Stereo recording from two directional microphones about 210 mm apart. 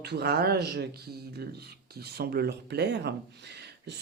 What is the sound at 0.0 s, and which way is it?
Speech, 50° right (ahead or behind).